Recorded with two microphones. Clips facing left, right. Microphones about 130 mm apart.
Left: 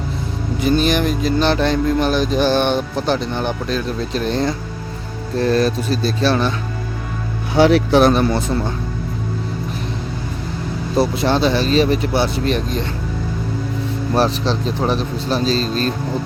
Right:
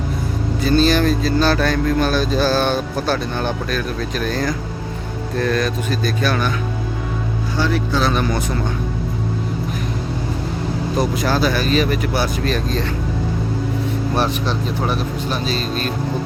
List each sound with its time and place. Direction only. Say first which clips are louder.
0.6 s speech: right 1 dB; 15° left (ahead or behind)
7.5 s speech: left 9 dB; 80° left
8.1 s speech: left 3 dB; 30° left (ahead or behind)
10.9 s speech: left 4 dB; 30° left (ahead or behind)
14.2 s speech: left 5 dB; 30° left (ahead or behind)